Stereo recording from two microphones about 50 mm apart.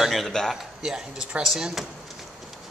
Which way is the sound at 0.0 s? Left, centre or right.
Centre.